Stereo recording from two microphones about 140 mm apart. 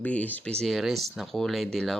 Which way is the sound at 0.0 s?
10° left (ahead or behind).